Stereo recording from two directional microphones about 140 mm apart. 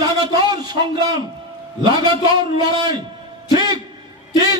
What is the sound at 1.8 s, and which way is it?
A man's voice, 30° right (ahead or behind).